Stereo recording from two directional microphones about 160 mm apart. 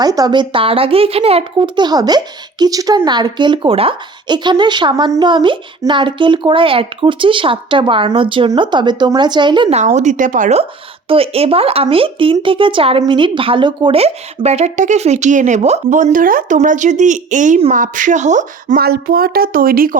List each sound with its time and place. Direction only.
0.0 s speech: 25° right (ahead or behind)
9.7 s a woman's voice: 45° right (ahead or behind)
11.1 s a woman's voice: 35° right (ahead or behind)
18.8 s speech: 70° right (ahead or behind)